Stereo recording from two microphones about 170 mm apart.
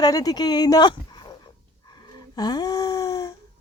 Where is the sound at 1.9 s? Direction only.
25° left (ahead or behind).